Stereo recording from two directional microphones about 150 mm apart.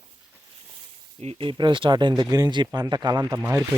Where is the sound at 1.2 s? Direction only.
40° right (ahead or behind).